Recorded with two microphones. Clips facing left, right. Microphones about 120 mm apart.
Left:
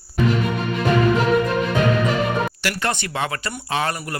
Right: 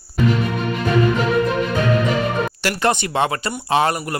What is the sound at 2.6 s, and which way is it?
Speech, 25° right (ahead or behind).